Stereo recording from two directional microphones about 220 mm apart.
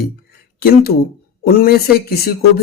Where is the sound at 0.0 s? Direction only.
45° left (ahead or behind).